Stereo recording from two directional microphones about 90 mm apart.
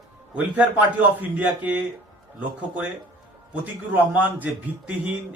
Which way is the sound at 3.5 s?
20° right (ahead or behind).